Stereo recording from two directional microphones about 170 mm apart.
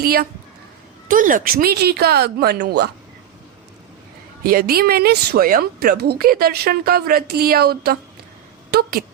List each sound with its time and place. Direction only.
0.0 s a woman's voice: 65° right (ahead or behind)
1.0 s speech: 55° right (ahead or behind); by 2.9 s 75° right (ahead or behind)
4.4 s a woman's voice: 65° right (ahead or behind)